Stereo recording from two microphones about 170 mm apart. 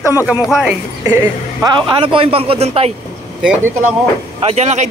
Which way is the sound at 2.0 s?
30° right (ahead or behind).